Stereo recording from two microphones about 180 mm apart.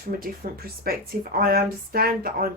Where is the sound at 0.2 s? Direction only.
55° right (ahead or behind).